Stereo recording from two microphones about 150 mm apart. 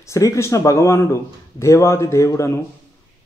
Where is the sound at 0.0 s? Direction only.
20° left (ahead or behind).